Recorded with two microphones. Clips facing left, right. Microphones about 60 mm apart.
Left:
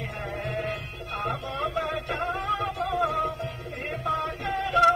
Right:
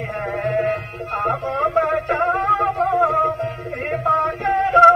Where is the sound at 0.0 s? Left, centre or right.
Right.